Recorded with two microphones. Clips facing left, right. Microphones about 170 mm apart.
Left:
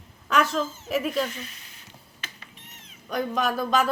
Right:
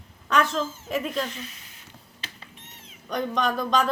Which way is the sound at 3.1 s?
5° left (ahead or behind).